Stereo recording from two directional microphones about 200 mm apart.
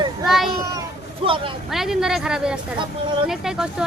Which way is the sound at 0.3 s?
Centre (ahead or behind).